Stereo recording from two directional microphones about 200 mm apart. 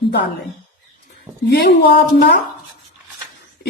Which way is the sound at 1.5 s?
55° left (ahead or behind).